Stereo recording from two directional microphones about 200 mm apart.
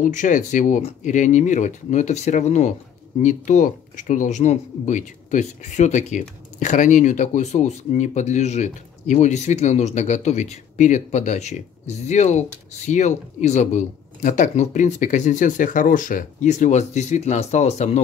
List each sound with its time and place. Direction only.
0.0 s speech: 40° left (ahead or behind)